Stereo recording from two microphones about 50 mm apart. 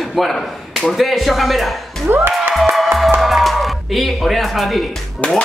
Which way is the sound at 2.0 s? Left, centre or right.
Right.